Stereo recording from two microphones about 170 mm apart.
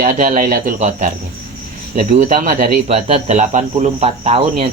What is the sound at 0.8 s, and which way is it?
Speech, 45° right (ahead or behind).